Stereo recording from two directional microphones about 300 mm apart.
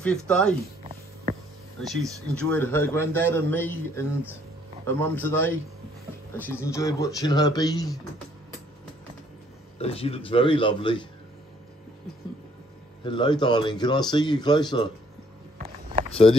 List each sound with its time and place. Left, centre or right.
0.0 s speech: centre
1.8 s a man's voice: centre
9.8 s a man's voice: centre
13.0 s a man's voice: centre
15.6 s a sound: right
16.1 s speech: centre